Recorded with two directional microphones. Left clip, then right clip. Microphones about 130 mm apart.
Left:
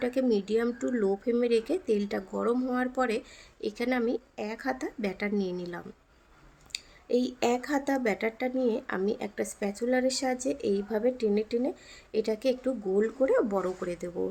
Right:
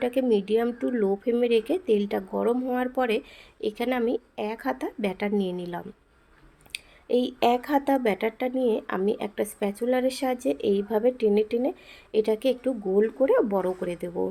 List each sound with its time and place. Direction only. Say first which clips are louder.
0.0 s speech: right 4 dB; 15° right (ahead or behind)